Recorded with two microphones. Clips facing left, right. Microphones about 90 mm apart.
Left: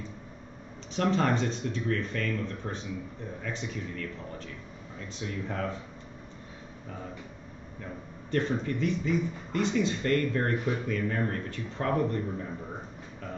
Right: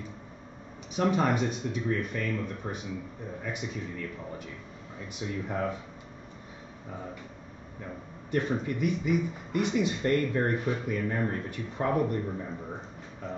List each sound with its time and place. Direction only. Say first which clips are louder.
0.9 s speech: even; 10° right (ahead or behind)
8.3 s speech: even; 15° right (ahead or behind)